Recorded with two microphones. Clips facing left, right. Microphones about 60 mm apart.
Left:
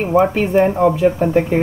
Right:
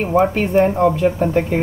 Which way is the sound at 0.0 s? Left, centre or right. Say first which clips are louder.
Left 1 dB; centre.